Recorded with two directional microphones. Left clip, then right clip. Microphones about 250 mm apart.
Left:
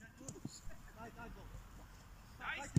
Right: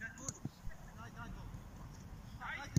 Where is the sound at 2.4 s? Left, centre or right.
Left.